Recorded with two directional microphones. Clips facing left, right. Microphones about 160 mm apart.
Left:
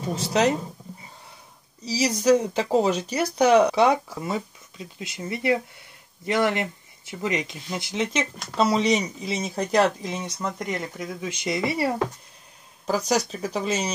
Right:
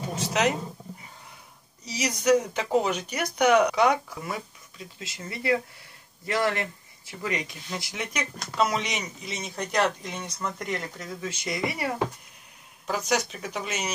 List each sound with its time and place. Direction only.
0.1 s speech: 30° left (ahead or behind)
1.9 s speech: 30° left (ahead or behind)
10.4 s speech: 15° left (ahead or behind)